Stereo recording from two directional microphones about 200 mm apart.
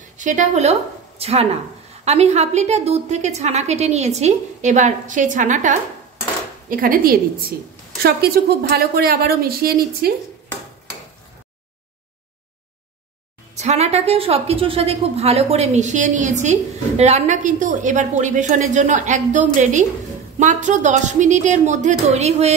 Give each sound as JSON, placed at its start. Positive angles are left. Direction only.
{"t": 0.2, "sound": "a woman's voice", "side_deg": -35}
{"t": 13.6, "sound": "a woman's voice", "side_deg": -35}